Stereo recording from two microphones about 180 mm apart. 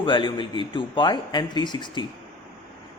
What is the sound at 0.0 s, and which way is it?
Speech, 25° left (ahead or behind).